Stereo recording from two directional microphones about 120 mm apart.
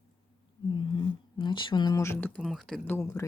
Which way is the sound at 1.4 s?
40° left (ahead or behind).